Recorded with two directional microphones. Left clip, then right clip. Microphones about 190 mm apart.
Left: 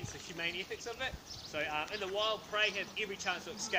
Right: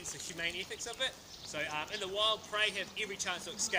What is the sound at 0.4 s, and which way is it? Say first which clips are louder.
Speech: even; 20° right (ahead or behind).